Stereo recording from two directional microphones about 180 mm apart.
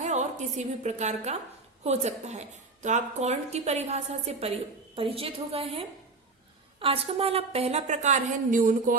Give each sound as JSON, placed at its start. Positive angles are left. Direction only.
{"t": 0.0, "sound": "a woman's voice", "side_deg": -40}